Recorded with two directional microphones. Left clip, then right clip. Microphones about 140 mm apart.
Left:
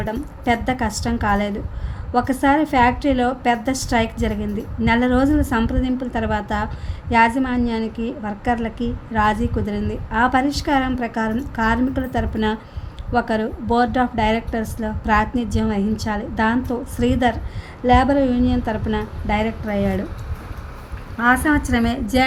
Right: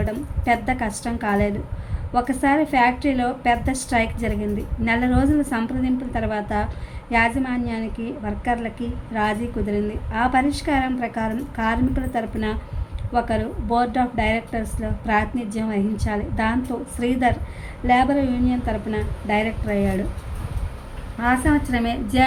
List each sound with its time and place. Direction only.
0.0 s a woman's voice: 50° left (ahead or behind)
21.2 s a woman's voice: 45° left (ahead or behind)